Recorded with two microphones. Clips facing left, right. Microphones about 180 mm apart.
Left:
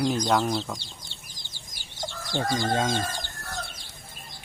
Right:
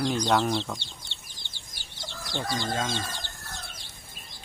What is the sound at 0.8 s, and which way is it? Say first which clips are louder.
Chicken: left 1 dB; 40° left (ahead or behind).